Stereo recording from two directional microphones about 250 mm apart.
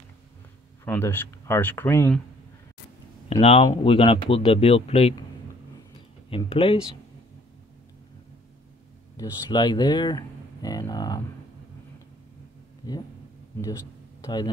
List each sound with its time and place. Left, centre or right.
0.8 s speech: centre
3.3 s speech: left
6.3 s speech: left
9.1 s speech: centre
14.2 s speech: centre